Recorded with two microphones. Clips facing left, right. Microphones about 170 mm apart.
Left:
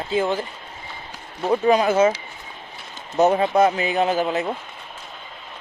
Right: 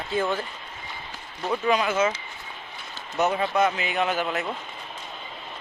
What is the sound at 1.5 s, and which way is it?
Speech, 35° left (ahead or behind).